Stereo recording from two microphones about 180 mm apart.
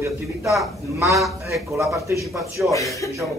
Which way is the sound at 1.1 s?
Centre (ahead or behind).